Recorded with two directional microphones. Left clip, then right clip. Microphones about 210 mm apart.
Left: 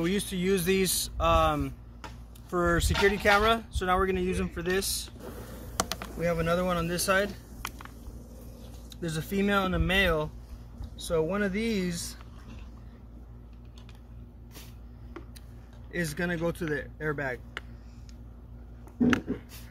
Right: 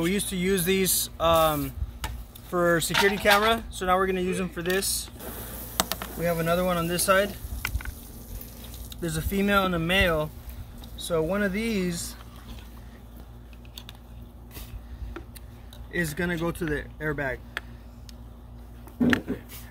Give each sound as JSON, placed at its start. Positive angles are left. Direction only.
{"t": 0.0, "sound": "mechanisms", "side_deg": 0}
{"t": 5.8, "sound": "a sound", "side_deg": -15}
{"t": 6.1, "sound": "speech", "side_deg": 0}
{"t": 8.9, "sound": "mechanisms", "side_deg": 0}
{"t": 15.9, "sound": "mechanisms", "side_deg": 0}
{"t": 16.4, "sound": "speech", "side_deg": 0}
{"t": 19.0, "sound": "mechanisms", "side_deg": 0}